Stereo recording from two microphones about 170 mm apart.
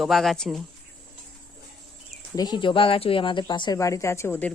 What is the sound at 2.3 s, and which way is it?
Speech, 25° left (ahead or behind).